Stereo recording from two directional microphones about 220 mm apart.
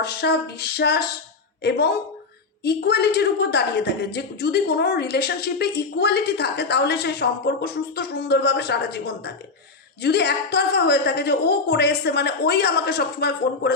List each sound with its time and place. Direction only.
0.0 s a woman's voice: 50° left (ahead or behind)